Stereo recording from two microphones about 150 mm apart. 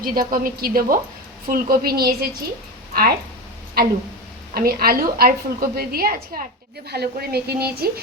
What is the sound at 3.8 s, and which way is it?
A woman's voice, 85° right.